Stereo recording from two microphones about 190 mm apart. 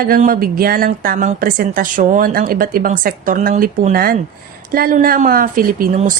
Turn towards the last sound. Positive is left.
turn(degrees=-45)  # may be behind; listen again after turning